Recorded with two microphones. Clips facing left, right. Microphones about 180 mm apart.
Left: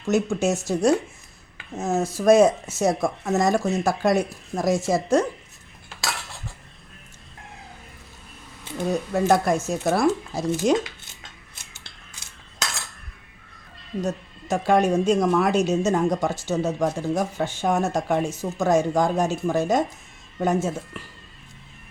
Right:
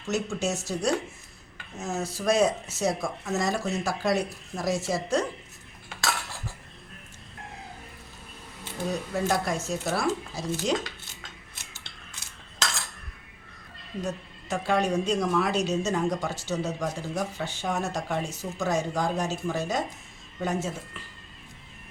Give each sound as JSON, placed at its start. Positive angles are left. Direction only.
{"t": 0.0, "sound": "speech", "side_deg": 50}
{"t": 8.9, "sound": "speech", "side_deg": 50}
{"t": 14.0, "sound": "speech", "side_deg": 45}